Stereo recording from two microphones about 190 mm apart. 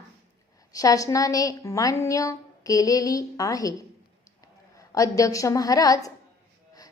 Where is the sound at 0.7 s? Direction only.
20° left (ahead or behind).